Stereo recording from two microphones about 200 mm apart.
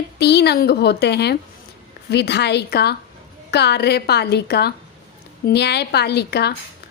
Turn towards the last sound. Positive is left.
turn(degrees=55)  # may be behind; listen again after turning